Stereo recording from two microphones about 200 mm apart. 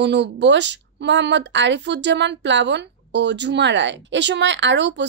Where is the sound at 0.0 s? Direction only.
60° right (ahead or behind).